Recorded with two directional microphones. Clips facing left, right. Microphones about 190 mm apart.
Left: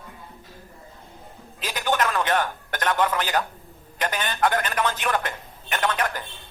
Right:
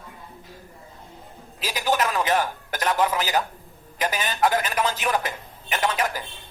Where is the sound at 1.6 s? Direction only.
10° right (ahead or behind).